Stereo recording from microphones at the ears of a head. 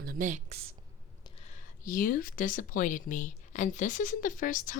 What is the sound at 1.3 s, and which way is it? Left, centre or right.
A woman's voice, left.